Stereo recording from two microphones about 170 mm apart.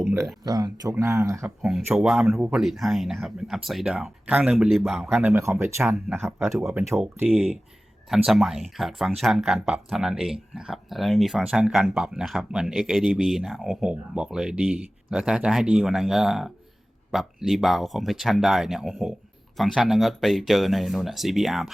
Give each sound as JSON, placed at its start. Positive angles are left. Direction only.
{"t": 0.4, "sound": "speech", "side_deg": -25}
{"t": 2.0, "sound": "speech", "side_deg": 0}
{"t": 5.1, "sound": "speech", "side_deg": -10}
{"t": 8.1, "sound": "speech", "side_deg": 0}